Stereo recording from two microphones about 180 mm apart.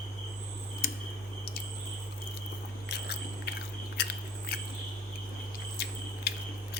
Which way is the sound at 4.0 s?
60° left (ahead or behind).